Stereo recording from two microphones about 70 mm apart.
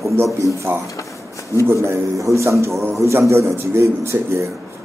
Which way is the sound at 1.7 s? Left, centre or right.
Right.